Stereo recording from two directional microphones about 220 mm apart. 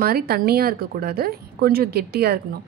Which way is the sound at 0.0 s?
45° right (ahead or behind).